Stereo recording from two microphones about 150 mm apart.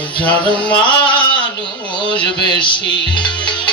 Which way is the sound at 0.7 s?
35° left (ahead or behind).